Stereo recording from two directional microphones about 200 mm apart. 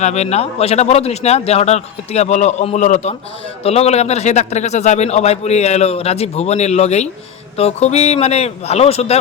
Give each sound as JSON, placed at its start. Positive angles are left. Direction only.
{"t": 0.0, "sound": "a man's voice", "side_deg": 35}